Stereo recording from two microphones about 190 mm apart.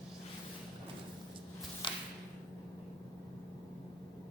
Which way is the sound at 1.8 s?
25° left (ahead or behind).